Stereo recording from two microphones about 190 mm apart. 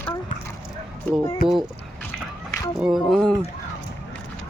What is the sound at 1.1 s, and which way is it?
Speech, 10° left (ahead or behind).